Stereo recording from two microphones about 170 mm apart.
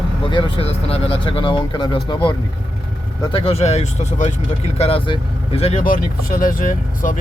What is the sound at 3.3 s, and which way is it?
Speech, 35° left (ahead or behind).